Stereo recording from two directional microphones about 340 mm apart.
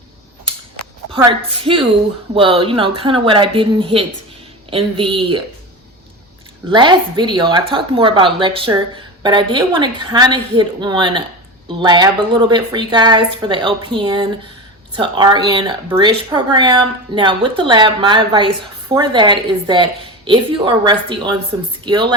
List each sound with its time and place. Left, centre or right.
1.1 s speech: centre
6.7 s speech: centre